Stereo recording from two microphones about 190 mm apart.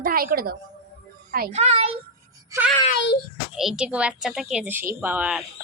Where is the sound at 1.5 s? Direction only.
30° right (ahead or behind).